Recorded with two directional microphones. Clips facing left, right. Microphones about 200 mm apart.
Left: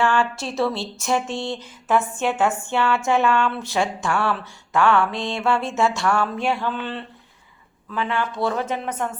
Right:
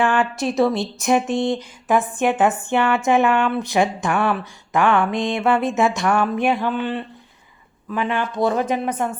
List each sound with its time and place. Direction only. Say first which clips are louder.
0.0 s speech: right 2 dB; 20° right (ahead or behind)